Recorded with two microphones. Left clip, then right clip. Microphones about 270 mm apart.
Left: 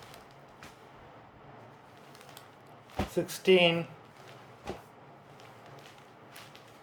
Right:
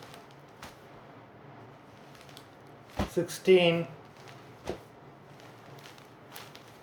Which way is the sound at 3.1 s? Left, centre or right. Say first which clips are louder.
Right 2 dB; centre.